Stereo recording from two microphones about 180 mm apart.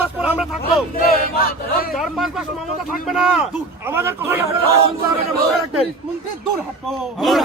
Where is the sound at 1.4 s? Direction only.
55° left (ahead or behind).